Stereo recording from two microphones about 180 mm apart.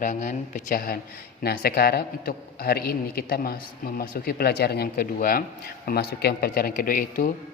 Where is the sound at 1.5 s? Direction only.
60° left (ahead or behind).